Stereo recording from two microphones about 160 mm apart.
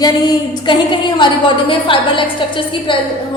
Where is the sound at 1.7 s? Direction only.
30° left (ahead or behind).